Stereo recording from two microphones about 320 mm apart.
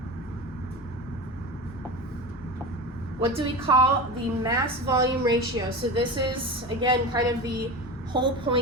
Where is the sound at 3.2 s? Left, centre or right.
Centre.